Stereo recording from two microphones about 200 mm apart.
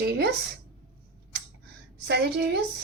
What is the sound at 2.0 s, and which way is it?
Speech, 55° right (ahead or behind).